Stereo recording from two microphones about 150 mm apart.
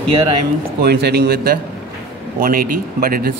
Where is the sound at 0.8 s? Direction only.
90° right.